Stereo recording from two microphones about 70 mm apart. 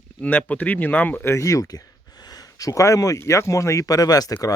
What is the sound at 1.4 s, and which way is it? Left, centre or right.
Speech, left.